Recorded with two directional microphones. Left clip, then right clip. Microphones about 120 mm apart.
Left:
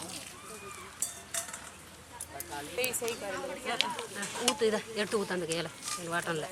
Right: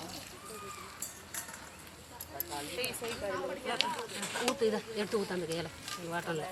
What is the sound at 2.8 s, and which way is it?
Speech, 20° left (ahead or behind).